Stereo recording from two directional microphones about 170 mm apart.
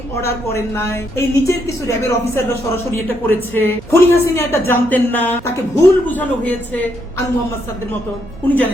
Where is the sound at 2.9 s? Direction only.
10° left (ahead or behind).